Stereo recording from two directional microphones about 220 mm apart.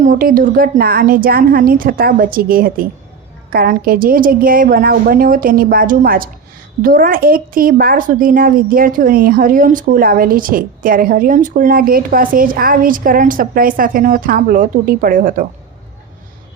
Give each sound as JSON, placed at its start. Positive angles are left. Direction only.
{"t": 0.0, "sound": "a woman's voice", "side_deg": -35}